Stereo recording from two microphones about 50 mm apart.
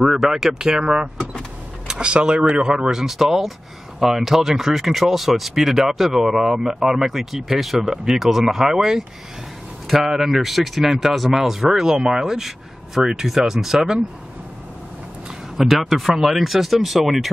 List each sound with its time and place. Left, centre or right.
0.0 s speech: centre
15.5 s speech: centre